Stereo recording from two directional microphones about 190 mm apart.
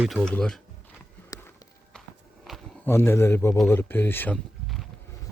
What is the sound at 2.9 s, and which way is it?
A man's voice, 10° left (ahead or behind).